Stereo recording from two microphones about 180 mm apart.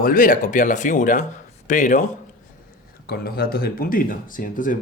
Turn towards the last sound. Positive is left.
turn(degrees=50)  # may be behind; listen again after turning